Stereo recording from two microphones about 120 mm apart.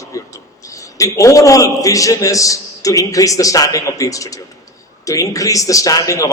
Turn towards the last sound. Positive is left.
turn(degrees=25)  # may be behind; listen again after turning